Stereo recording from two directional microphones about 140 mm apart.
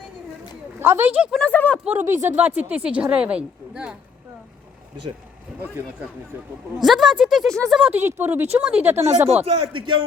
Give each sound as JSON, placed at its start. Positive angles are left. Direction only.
{"t": 0.8, "sound": "a woman's voice", "side_deg": -15}
{"t": 1.3, "sound": "speech", "side_deg": 10}
{"t": 1.8, "sound": "a woman's voice", "side_deg": -10}
{"t": 5.6, "sound": "a woman's voice", "side_deg": -15}
{"t": 6.7, "sound": "a woman's voice", "side_deg": 0}
{"t": 7.9, "sound": "a woman's voice", "side_deg": -15}
{"t": 9.3, "sound": "a man's voice", "side_deg": -45}